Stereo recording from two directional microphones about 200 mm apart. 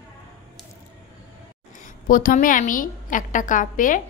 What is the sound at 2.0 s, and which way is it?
A woman's voice, 45° left (ahead or behind).